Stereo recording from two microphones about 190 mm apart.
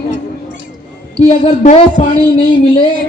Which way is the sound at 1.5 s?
35° left (ahead or behind).